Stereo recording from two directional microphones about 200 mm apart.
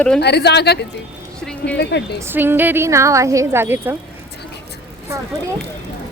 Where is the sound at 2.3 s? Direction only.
10° right (ahead or behind).